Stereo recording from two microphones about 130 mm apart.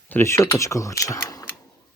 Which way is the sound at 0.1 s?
20° left (ahead or behind).